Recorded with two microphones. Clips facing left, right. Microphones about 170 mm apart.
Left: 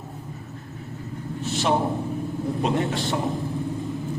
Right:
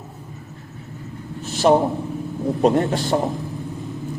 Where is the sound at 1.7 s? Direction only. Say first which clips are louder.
Right 8 dB; 45° right (ahead or behind).